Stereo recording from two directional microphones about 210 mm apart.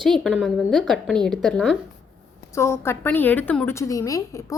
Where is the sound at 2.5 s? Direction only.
15° left (ahead or behind).